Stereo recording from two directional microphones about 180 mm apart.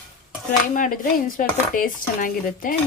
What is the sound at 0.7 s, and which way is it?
Dishes, 45° left (ahead or behind).